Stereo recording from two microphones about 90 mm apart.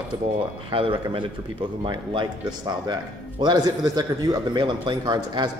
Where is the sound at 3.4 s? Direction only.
50° right (ahead or behind).